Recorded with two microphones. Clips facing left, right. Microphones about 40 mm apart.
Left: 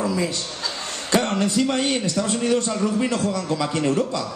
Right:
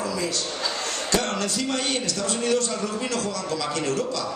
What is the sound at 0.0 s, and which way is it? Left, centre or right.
Chuckle, centre.